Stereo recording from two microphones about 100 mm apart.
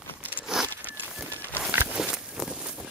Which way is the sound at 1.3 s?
20° left (ahead or behind).